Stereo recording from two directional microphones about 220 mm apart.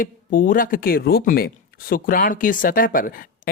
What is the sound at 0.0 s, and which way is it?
Speech, 40° left (ahead or behind).